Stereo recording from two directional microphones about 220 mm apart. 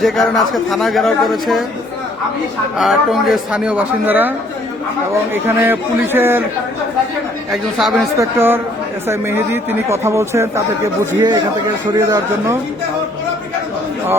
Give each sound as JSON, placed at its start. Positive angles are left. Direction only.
{"t": 0.0, "sound": "speech", "side_deg": 0}
{"t": 2.7, "sound": "speech", "side_deg": 0}
{"t": 5.3, "sound": "a man's voice", "side_deg": -10}
{"t": 7.5, "sound": "speech", "side_deg": 0}
{"t": 8.1, "sound": "a man's voice", "side_deg": -10}